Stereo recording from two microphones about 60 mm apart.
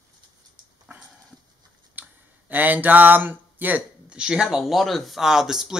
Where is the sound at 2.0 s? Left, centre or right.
Right.